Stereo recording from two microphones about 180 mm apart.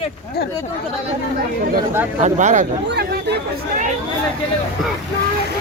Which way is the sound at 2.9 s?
65° right (ahead or behind).